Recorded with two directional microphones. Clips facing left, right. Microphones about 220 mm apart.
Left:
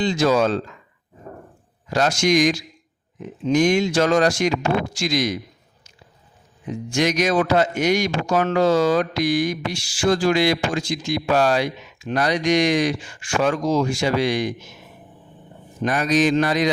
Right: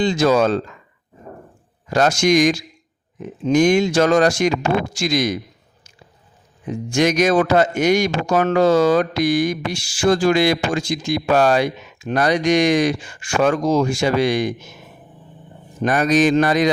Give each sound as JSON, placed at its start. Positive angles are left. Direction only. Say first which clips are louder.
{"t": 0.0, "sound": "speech", "louder": "right 2 dB", "side_deg": -50}
{"t": 1.9, "sound": "speech", "louder": "right 3 dB", "side_deg": -50}
{"t": 6.7, "sound": "speech", "louder": "right 3 dB", "side_deg": -50}
{"t": 15.8, "sound": "speech", "louder": "right 3 dB", "side_deg": -50}